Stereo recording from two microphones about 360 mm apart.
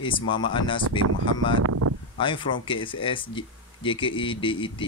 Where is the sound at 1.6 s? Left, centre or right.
Right.